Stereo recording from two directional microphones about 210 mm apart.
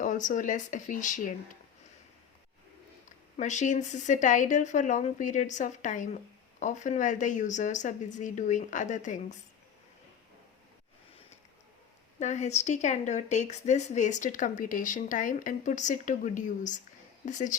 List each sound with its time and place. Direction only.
0.0 s speech: 35° left (ahead or behind)
3.3 s speech: 35° left (ahead or behind)
12.2 s speech: 35° left (ahead or behind)